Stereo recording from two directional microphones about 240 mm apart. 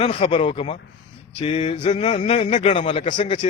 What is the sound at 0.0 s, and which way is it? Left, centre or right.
Speech, left.